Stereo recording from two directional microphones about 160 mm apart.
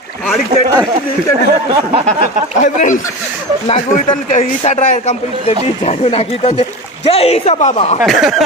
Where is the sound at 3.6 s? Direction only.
40° left (ahead or behind).